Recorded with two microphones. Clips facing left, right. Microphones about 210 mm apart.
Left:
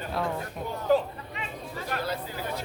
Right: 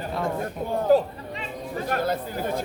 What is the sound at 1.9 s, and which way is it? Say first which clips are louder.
Speech: right 6 dB; 50° right (ahead or behind).